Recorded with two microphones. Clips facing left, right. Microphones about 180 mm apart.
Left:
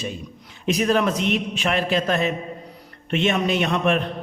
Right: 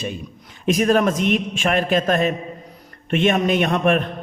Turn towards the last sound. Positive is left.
turn(degrees=-50)  # may be behind; listen again after turning